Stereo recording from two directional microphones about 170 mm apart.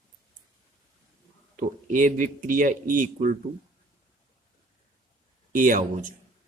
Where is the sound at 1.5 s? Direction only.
50° right (ahead or behind).